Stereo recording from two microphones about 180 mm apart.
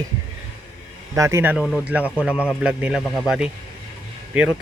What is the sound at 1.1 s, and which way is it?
Speech, 15° right (ahead or behind).